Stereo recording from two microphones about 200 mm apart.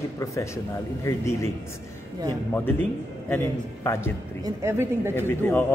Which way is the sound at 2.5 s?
10° left (ahead or behind).